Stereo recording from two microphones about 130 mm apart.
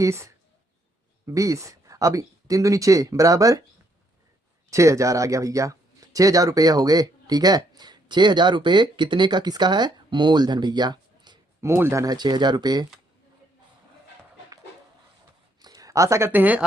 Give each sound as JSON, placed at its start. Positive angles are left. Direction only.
{"t": 0.0, "sound": "speech", "side_deg": -20}
{"t": 4.7, "sound": "speech", "side_deg": -25}
{"t": 11.6, "sound": "speech", "side_deg": -20}
{"t": 15.6, "sound": "speech", "side_deg": -30}